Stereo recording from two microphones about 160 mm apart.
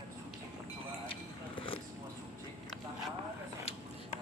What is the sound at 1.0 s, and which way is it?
Vehicle, 35° left (ahead or behind).